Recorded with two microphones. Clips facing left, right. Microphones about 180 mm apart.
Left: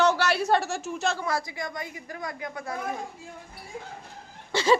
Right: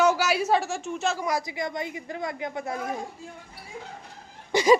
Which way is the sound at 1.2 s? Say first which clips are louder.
Right 2 dB; 20° right (ahead or behind).